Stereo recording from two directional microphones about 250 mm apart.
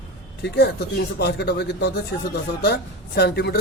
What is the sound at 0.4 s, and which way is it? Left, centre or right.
A man's voice, left.